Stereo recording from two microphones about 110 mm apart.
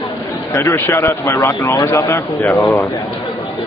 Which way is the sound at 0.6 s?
25° left (ahead or behind).